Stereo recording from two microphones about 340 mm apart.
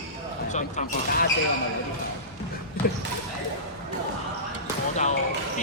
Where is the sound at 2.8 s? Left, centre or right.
Left.